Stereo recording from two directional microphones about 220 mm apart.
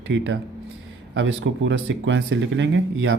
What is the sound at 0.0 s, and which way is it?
Speech, 55° right (ahead or behind).